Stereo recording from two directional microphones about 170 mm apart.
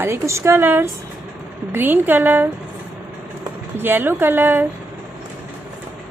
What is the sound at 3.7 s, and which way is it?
Speech, 10° right (ahead or behind).